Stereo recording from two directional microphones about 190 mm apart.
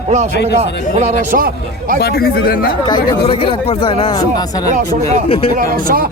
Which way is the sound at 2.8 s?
25° left (ahead or behind).